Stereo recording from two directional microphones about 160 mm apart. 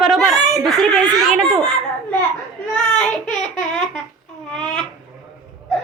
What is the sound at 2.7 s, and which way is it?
Child singing, 5° left (ahead or behind).